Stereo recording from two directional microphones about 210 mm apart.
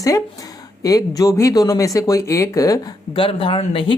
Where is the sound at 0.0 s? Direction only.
15° left (ahead or behind).